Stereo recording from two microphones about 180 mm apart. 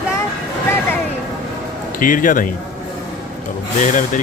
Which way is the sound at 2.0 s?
50° left (ahead or behind).